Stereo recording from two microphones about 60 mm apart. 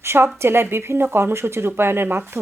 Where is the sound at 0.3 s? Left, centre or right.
Right.